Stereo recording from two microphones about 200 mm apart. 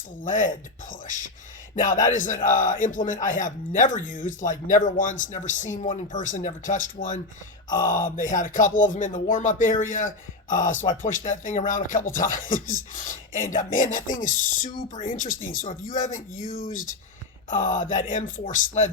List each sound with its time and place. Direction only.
0.2 s a man's voice: 40° left (ahead or behind)
17.5 s a man's voice: 40° left (ahead or behind)